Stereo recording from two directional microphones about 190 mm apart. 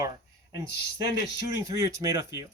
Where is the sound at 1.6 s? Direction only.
15° right (ahead or behind).